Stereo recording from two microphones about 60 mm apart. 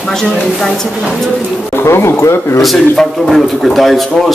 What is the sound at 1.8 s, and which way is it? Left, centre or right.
Speech, left.